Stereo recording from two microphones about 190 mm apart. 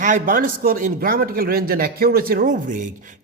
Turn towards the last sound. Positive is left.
turn(degrees=-40)  # may be behind; listen again after turning